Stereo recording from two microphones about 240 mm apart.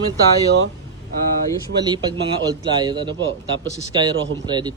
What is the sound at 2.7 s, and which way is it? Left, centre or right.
Speech, centre.